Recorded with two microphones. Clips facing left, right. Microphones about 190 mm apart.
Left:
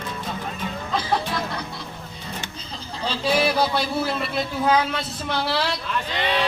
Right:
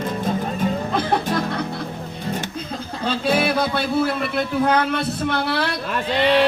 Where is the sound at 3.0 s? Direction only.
55° right (ahead or behind).